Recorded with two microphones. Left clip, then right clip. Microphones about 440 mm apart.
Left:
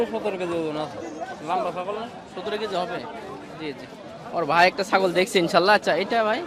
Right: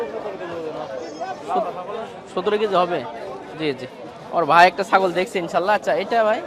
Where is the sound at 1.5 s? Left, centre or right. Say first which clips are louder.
Right 3 dB; left.